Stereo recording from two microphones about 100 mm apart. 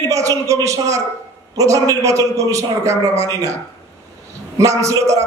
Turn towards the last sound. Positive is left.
turn(degrees=-30)  # may be behind; listen again after turning